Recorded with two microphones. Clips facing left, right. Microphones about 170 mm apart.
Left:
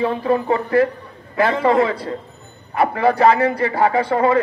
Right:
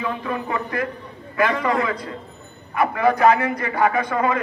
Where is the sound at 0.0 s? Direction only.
35° left (ahead or behind).